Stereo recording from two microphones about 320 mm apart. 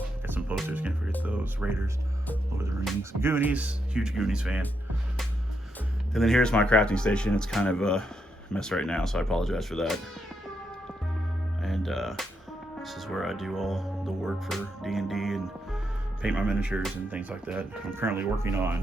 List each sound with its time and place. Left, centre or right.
0.3 s music: centre
2.6 s speech: centre
6.1 s speech: centre
11.6 s speech: centre